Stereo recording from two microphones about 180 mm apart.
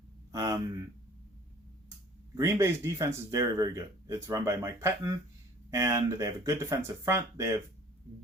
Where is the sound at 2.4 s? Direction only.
15° right (ahead or behind).